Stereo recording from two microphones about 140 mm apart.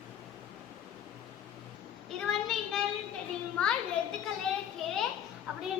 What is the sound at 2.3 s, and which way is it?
Child singing, 5° left (ahead or behind).